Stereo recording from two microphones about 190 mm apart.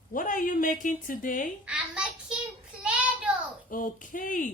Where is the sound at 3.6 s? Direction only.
45° left (ahead or behind).